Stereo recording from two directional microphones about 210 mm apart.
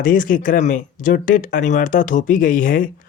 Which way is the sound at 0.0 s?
40° left (ahead or behind).